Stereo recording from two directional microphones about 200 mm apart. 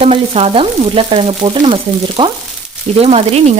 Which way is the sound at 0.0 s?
30° right (ahead or behind).